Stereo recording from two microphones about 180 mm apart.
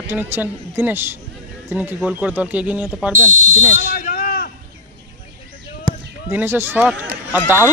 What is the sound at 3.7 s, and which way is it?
Smoke detector, 55° left (ahead or behind).